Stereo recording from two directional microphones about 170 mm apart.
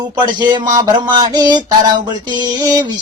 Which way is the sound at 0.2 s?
25° right (ahead or behind).